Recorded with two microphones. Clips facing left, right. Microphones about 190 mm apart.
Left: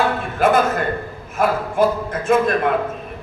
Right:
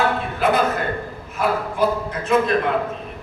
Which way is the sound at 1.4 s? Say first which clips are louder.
Left 3 dB; 50° left (ahead or behind).